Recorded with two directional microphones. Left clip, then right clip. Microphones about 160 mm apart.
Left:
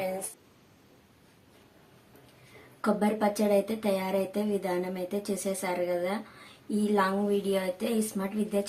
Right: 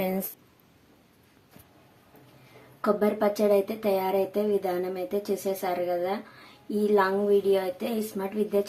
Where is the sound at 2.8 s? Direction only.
10° left (ahead or behind).